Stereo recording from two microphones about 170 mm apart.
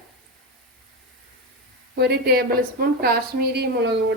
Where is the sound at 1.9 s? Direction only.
65° right (ahead or behind).